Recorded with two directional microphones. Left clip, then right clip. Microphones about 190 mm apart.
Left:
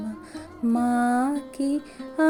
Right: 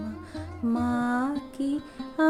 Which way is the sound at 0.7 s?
25° left (ahead or behind).